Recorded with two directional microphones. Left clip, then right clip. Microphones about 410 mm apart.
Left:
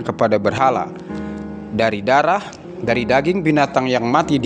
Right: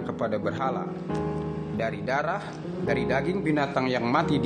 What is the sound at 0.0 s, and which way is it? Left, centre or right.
A man's voice, centre.